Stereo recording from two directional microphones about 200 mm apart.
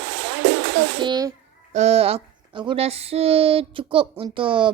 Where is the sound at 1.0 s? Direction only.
20° right (ahead or behind).